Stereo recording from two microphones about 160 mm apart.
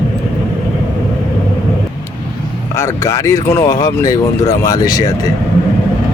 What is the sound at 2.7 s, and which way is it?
Speech, 20° left (ahead or behind).